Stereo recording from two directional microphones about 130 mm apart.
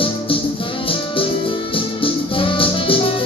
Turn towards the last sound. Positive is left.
turn(degrees=45)  # may be behind; listen again after turning